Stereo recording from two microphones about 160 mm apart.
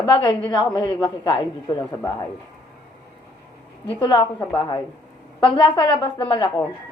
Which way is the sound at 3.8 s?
35° left (ahead or behind).